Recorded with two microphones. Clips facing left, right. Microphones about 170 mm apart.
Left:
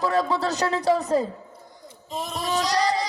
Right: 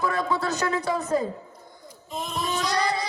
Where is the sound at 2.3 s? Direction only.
35° left (ahead or behind).